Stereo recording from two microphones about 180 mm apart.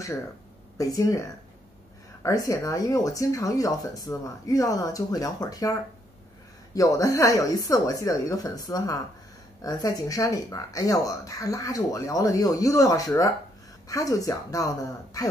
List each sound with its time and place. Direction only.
0.7 s speech: 20° left (ahead or behind)
2.2 s speech: 20° left (ahead or behind)